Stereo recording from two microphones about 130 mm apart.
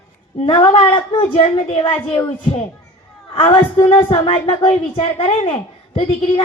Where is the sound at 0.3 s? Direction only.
45° left (ahead or behind).